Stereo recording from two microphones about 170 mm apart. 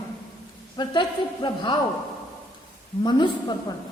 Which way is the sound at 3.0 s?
25° left (ahead or behind).